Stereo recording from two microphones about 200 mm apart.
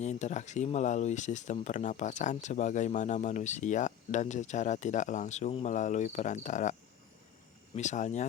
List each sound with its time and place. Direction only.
0.0 s speech: 35° left (ahead or behind)
7.8 s speech: 35° left (ahead or behind)